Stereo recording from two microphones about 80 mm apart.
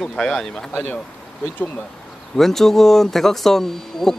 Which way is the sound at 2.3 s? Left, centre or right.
Centre.